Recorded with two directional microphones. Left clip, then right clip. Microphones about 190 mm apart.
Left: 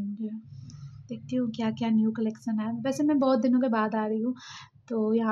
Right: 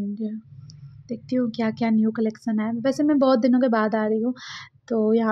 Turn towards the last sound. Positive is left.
turn(degrees=-30)  # may be behind; listen again after turning